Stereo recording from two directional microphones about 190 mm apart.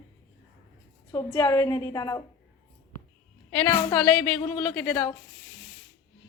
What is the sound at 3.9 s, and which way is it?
A woman's voice, 10° left (ahead or behind).